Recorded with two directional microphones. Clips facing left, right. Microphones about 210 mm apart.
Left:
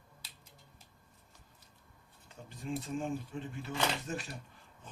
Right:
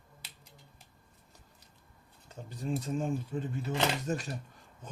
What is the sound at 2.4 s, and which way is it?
Speech, 40° right (ahead or behind).